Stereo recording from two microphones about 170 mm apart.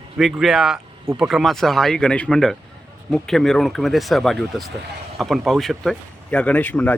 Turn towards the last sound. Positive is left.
turn(degrees=10)  # may be behind; listen again after turning